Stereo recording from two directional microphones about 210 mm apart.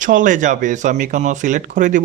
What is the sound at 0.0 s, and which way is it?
Speech, 40° right (ahead or behind).